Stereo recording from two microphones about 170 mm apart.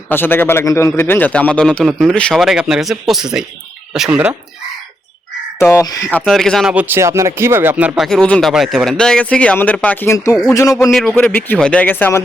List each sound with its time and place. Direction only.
0.1 s a man's voice: 10° left (ahead or behind); by 4.4 s 5° right (ahead or behind)
5.5 s speech: 15° left (ahead or behind)
6.1 s speech: 5° left (ahead or behind)
10.9 s a man's voice: 5° left (ahead or behind)